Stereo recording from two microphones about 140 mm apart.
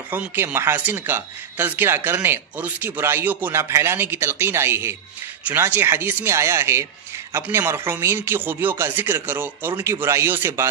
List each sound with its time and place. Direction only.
0.1 s speech: 15° right (ahead or behind)